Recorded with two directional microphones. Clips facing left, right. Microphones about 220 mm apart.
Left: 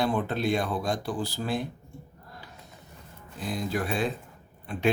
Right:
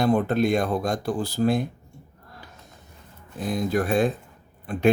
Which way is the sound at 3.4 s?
45° right (ahead or behind).